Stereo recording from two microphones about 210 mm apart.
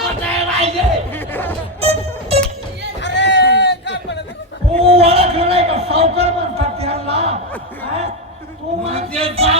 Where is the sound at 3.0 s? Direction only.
55° left (ahead or behind).